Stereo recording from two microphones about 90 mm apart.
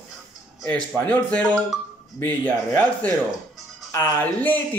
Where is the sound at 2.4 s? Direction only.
20° left (ahead or behind).